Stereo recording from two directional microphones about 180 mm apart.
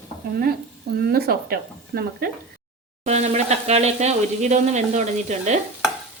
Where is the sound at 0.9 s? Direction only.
60° right (ahead or behind).